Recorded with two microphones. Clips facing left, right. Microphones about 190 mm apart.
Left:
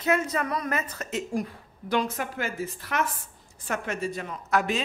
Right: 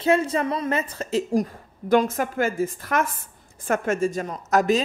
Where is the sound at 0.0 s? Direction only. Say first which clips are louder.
Right 5 dB; 30° right (ahead or behind).